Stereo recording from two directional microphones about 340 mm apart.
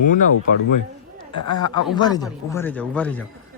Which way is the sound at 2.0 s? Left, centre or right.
Centre.